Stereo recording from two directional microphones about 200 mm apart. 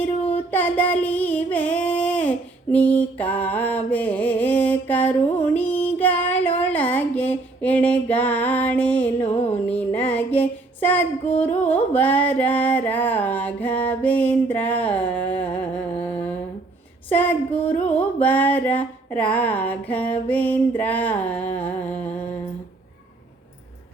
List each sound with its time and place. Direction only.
0.3 s music: 10° left (ahead or behind)
5.5 s female singing: 10° left (ahead or behind)
6.6 s a sound: 10° left (ahead or behind)
9.2 s music: 30° left (ahead or behind)
9.6 s music: 10° left (ahead or behind)
10.8 s female singing: 10° left (ahead or behind)
11.7 s a sound: 10° left (ahead or behind)
17.1 s female singing: 10° left (ahead or behind)
17.8 s music: 10° left (ahead or behind)
20.2 s a sound: 10° left (ahead or behind)